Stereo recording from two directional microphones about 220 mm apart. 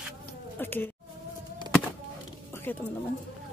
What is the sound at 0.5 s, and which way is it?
Speech, 10° left (ahead or behind).